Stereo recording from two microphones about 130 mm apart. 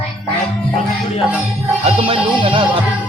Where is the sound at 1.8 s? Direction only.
45° right (ahead or behind).